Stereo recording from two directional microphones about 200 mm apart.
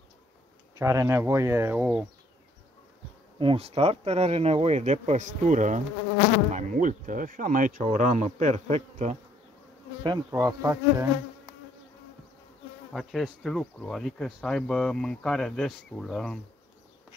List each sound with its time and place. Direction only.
0.7 s speech: 15° right (ahead or behind)
3.3 s speech: 30° right (ahead or behind)
10.0 s speech: 20° right (ahead or behind)
12.9 s speech: centre (ahead or behind)